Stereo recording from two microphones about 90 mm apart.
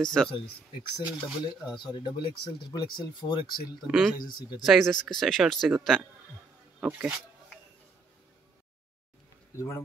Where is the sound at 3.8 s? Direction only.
5° right (ahead or behind).